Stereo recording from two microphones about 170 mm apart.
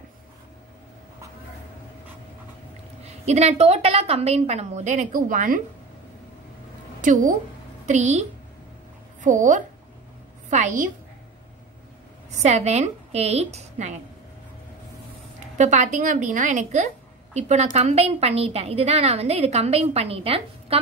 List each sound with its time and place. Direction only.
3.0 s a woman's voice: 40° right (ahead or behind)
7.0 s a woman's voice: 50° right (ahead or behind)
12.4 s a woman's voice: 40° right (ahead or behind)
15.5 s a woman's voice: 45° right (ahead or behind)